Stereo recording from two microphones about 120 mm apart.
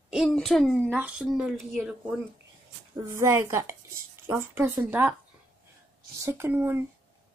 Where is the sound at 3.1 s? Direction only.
25° right (ahead or behind).